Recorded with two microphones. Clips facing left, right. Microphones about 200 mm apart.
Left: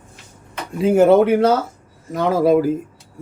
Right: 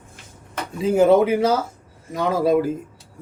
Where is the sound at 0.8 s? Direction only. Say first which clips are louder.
Left 3 dB; 60° left (ahead or behind).